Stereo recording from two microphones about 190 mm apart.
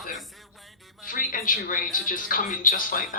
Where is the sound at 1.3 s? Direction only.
45° left (ahead or behind).